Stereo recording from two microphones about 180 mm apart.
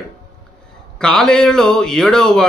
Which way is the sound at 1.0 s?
5° left (ahead or behind).